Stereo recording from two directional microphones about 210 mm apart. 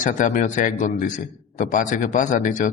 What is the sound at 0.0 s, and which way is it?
A man's voice, 35° left (ahead or behind).